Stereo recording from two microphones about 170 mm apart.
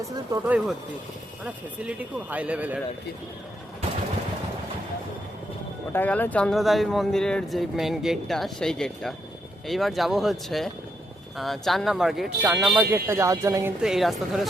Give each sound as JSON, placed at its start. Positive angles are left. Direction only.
{"t": 0.0, "sound": "speech", "side_deg": -10}
{"t": 5.9, "sound": "speech", "side_deg": 10}
{"t": 13.8, "sound": "speech", "side_deg": 0}